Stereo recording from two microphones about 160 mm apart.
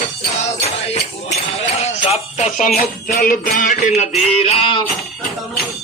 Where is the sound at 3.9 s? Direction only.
40° left (ahead or behind).